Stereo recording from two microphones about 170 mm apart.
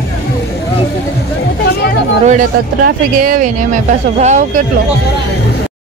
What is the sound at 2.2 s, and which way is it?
Speech, 50° right (ahead or behind).